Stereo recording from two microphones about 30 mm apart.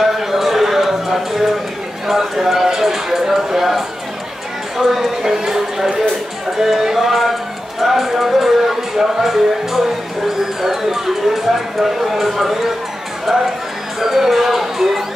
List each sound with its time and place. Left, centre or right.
0.0 s a sound: centre
2.1 s speech: centre
4.7 s speech: centre